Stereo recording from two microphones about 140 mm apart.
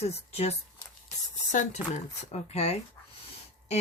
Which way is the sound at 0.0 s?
50° left (ahead or behind).